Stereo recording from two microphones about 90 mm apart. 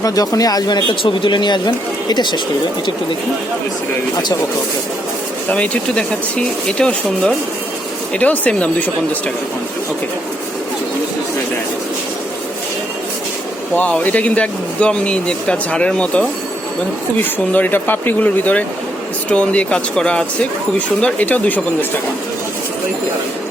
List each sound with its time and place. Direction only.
0.0 s speech: 40° left (ahead or behind)
5.5 s speech: 15° left (ahead or behind)
13.7 s speech: 15° left (ahead or behind)